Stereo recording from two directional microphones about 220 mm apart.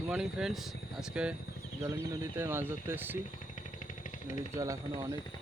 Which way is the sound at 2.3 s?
10° right (ahead or behind).